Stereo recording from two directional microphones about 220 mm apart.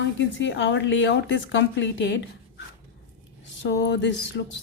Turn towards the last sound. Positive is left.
turn(degrees=50)  # may be behind; listen again after turning